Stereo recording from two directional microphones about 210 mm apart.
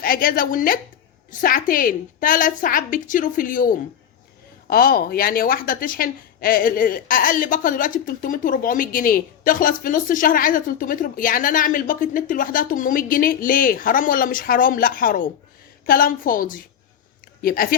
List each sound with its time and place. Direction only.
0.0 s a woman's voice: 45° left (ahead or behind)